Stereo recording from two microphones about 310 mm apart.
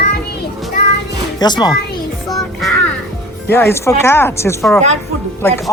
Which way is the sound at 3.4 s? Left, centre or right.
Centre.